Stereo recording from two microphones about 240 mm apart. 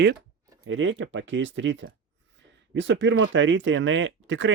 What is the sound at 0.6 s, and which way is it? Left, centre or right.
Speech, right.